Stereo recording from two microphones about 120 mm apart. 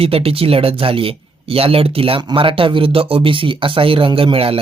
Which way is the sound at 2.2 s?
40° right (ahead or behind).